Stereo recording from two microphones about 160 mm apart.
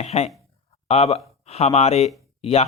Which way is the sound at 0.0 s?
40° left (ahead or behind).